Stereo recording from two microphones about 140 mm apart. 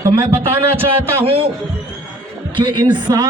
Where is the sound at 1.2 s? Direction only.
40° right (ahead or behind).